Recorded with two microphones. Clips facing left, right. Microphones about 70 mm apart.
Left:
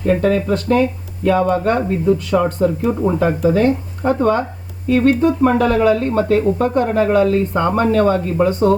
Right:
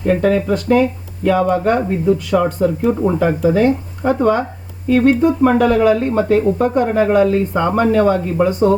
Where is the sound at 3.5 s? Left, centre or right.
Centre.